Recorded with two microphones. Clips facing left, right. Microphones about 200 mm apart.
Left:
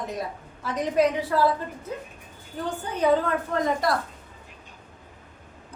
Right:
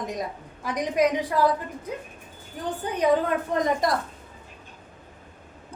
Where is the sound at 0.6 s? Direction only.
15° right (ahead or behind).